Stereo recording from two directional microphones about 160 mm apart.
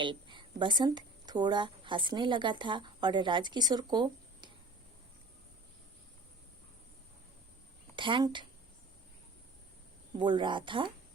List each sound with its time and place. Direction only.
0.0 s a woman's voice: 30° right (ahead or behind)
7.9 s a woman's voice: 30° right (ahead or behind)
10.2 s a woman's voice: 30° right (ahead or behind)